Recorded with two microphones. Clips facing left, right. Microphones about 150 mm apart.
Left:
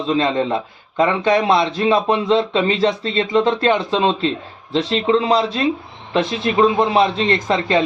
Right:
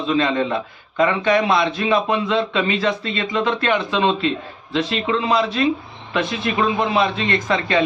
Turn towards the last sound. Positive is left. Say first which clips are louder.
# left 2 dB
turn(degrees=30)  # may be behind; listen again after turning